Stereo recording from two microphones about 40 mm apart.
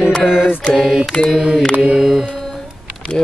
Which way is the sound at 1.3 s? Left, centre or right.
Centre.